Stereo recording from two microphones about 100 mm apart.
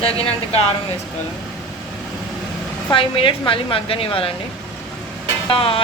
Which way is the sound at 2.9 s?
60° left (ahead or behind).